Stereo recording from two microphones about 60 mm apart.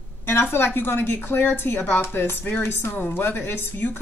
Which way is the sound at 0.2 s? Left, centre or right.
Left.